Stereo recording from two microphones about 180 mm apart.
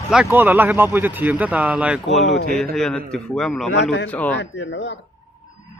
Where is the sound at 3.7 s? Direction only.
70° left (ahead or behind).